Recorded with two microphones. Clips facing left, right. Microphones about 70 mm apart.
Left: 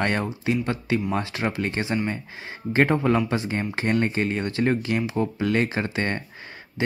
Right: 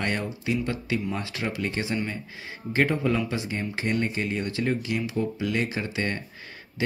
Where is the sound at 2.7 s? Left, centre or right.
Left.